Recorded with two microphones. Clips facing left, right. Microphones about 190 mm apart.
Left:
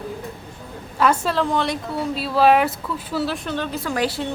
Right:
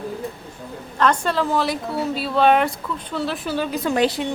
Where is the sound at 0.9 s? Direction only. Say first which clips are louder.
Even; 5° left (ahead or behind).